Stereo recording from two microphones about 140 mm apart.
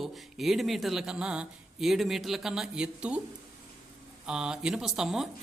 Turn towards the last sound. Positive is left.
turn(degrees=-5)  # may be behind; listen again after turning